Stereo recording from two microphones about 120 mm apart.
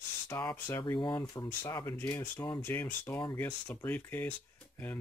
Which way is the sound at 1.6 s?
20° left (ahead or behind).